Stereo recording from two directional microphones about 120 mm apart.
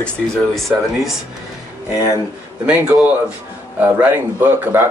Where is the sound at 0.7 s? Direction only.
10° right (ahead or behind).